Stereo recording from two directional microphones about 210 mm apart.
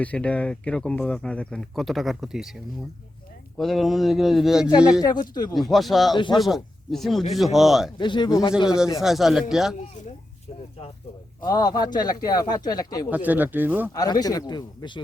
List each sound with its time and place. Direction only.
0.0 s speech: 5° left (ahead or behind)
3.6 s speech: centre (ahead or behind)
4.9 s speech: 20° left (ahead or behind)
5.5 s speech: centre (ahead or behind)
7.9 s speech: 20° left (ahead or behind)
9.0 s speech: centre (ahead or behind)
11.4 s speech: 20° left (ahead or behind)
13.1 s speech: 10° right (ahead or behind)
13.9 s speech: 20° left (ahead or behind)